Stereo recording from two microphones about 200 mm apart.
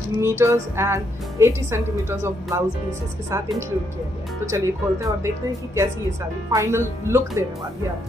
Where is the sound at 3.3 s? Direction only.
15° right (ahead or behind).